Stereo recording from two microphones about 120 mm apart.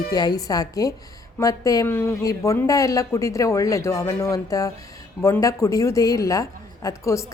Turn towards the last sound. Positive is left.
turn(degrees=25)  # may be behind; listen again after turning